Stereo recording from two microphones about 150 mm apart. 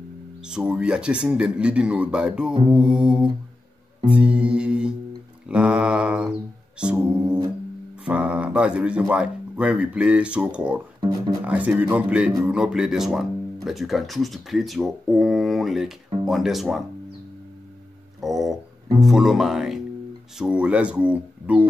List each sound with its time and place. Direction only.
0.4 s speech: 5° right (ahead or behind)
11.0 s speech: 25° right (ahead or behind)
11.4 s speech: 10° right (ahead or behind)
18.2 s speech: centre (ahead or behind)